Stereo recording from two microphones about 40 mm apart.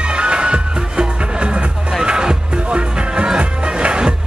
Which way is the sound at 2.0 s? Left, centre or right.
Right.